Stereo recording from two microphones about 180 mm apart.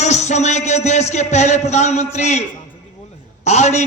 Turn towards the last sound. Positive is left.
turn(degrees=40)  # may be behind; listen again after turning